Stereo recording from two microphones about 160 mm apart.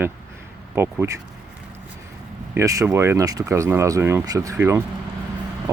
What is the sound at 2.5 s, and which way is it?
Speech, 20° right (ahead or behind).